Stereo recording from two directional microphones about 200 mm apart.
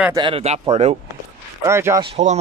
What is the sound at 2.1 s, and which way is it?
Speech, 35° right (ahead or behind).